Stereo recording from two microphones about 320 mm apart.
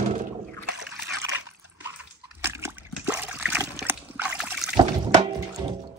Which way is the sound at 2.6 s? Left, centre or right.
Centre.